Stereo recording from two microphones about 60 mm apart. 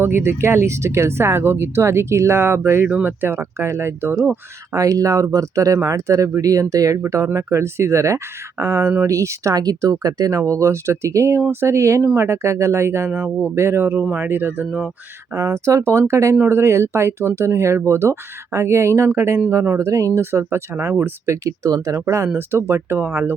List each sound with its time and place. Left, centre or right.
0.0 s speech: right
4.7 s speech: right
7.3 s speech: right
15.4 s speech: right
16.3 s speech: right
19.7 s speech: right
20.1 s speech: right
21.2 s speech: right
22.0 s speech: right
22.4 s speech: right